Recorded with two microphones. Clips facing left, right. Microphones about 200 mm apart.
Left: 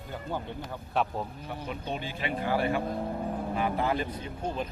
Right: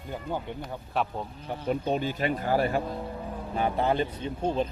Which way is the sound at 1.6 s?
45° right (ahead or behind).